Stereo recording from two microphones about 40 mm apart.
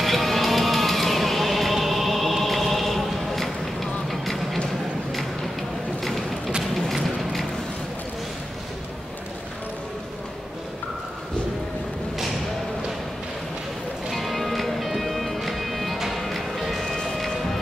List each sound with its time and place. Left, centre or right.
0.0 s music: centre
6.0 s a sound: centre
14.1 s music: centre